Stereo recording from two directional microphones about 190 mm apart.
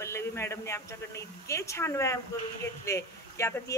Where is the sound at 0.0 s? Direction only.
15° left (ahead or behind).